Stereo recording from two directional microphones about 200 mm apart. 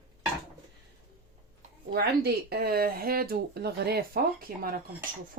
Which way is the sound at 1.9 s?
55° right (ahead or behind).